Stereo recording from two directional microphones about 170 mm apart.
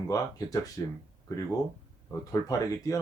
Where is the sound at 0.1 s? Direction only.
20° left (ahead or behind).